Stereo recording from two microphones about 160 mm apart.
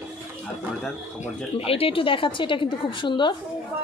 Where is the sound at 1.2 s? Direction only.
40° left (ahead or behind).